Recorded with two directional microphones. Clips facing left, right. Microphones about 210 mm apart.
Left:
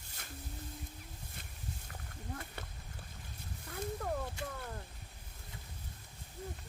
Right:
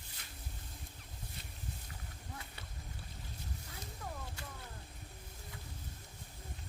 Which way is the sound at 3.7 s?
55° left (ahead or behind).